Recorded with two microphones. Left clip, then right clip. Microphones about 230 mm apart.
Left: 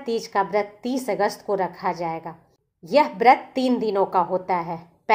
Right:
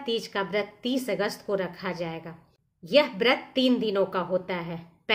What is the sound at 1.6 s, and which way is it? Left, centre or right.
A woman's voice, centre.